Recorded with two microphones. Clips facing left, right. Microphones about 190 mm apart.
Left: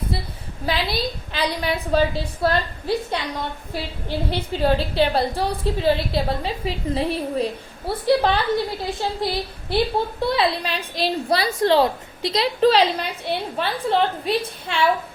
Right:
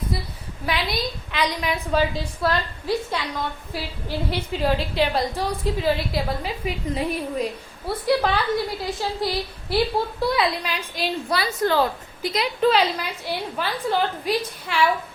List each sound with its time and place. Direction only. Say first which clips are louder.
0.6 s a woman's voice: left 2 dB; 30° left (ahead or behind)
4.3 s a woman's voice: left 3 dB; 30° left (ahead or behind)